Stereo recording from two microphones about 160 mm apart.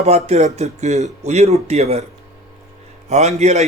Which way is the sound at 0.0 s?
45° right (ahead or behind).